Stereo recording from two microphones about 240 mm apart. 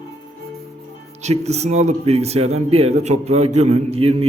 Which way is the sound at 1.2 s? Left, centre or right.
Right.